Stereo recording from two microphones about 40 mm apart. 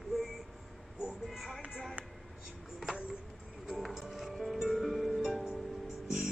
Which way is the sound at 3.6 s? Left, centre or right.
Centre.